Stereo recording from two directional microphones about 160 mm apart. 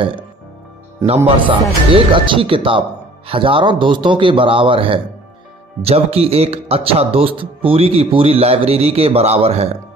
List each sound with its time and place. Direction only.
1.0 s a man's voice: 35° right (ahead or behind)